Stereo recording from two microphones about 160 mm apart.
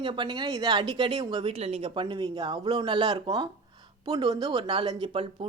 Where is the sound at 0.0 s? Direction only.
30° right (ahead or behind).